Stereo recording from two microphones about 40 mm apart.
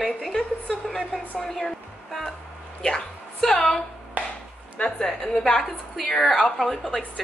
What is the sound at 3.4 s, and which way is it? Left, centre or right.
Speech, centre.